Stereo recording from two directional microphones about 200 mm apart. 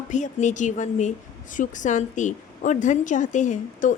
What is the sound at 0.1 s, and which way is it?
A woman's voice, 35° left (ahead or behind).